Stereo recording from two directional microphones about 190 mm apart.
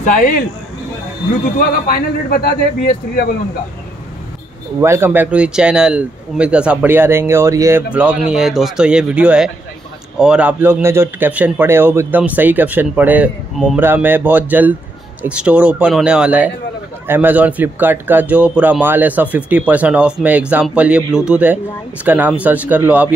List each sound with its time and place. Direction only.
1.6 s a man's voice: 50° left (ahead or behind)
4.8 s a man's voice: 10° right (ahead or behind)